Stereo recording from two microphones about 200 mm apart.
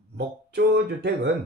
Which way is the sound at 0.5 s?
55° right (ahead or behind).